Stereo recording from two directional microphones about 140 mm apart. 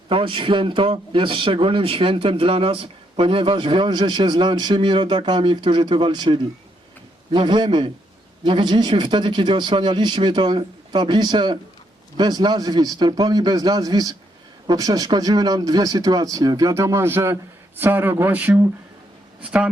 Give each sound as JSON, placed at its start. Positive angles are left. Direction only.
{"t": 0.1, "sound": "a man's voice", "side_deg": -40}